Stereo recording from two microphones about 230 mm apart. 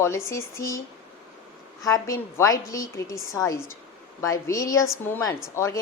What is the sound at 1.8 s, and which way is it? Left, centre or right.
Speech, centre.